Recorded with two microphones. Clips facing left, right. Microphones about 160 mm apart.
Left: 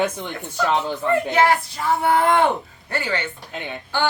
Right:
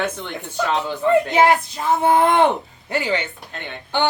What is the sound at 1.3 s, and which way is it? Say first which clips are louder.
Speech: right 2 dB; 20° right (ahead or behind).